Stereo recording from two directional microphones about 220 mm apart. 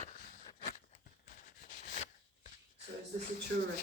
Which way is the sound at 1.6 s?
35° left (ahead or behind).